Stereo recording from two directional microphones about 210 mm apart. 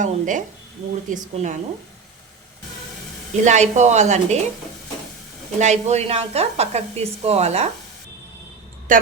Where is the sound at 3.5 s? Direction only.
35° right (ahead or behind).